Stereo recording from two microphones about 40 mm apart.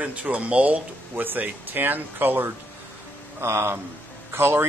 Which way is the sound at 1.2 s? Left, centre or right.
Right.